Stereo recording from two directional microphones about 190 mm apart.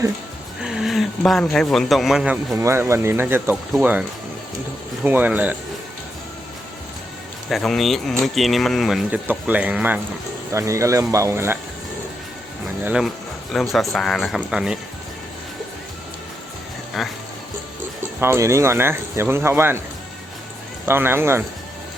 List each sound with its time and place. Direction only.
0.6 s speech: 5° right (ahead or behind)
5.0 s speech: 10° right (ahead or behind)
7.5 s speech: centre (ahead or behind)
12.8 s speech: 5° right (ahead or behind)
17.0 s speech: centre (ahead or behind)
18.2 s speech: 15° right (ahead or behind)
20.8 s speech: 10° right (ahead or behind)